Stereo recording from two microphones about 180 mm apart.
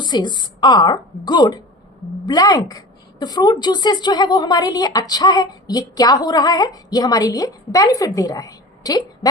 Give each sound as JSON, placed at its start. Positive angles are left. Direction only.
{"t": 0.0, "sound": "a woman's voice", "side_deg": 25}